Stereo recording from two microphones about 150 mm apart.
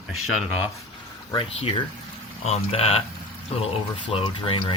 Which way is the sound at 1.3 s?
35° left (ahead or behind).